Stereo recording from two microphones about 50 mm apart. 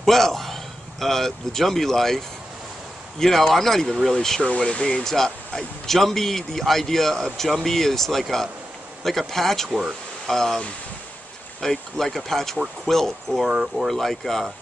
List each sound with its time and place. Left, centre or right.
0.0 s a man's voice: centre
4.4 s speech: left
5.0 s a man's voice: centre
11.6 s a man's voice: centre
13.5 s speech: centre
13.8 s a man's voice: centre